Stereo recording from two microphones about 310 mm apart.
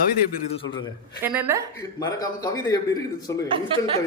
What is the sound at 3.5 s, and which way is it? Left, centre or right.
Speech, centre.